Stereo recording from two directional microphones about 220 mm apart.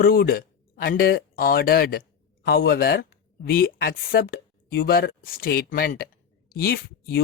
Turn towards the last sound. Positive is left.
turn(degrees=45)  # may be behind; listen again after turning